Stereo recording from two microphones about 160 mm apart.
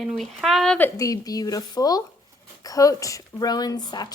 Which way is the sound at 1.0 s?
20° left (ahead or behind).